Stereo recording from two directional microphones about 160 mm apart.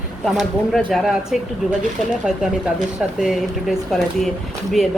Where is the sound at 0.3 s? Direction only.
Centre (ahead or behind).